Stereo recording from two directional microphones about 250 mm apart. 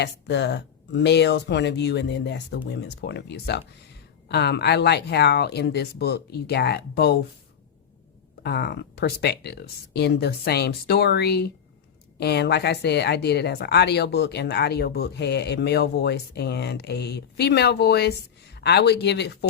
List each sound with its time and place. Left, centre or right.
0.0 s speech: left
8.4 s speech: left